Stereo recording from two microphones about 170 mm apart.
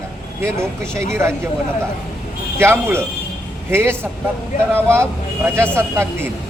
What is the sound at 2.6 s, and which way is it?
A woman's voice, 15° right (ahead or behind).